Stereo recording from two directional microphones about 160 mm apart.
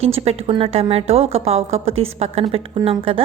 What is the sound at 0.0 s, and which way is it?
A woman's voice, 40° right (ahead or behind).